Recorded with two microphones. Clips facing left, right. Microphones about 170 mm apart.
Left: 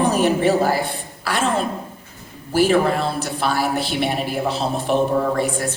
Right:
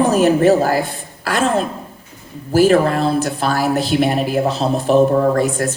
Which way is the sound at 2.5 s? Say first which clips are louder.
Right 4 dB; 40° right (ahead or behind).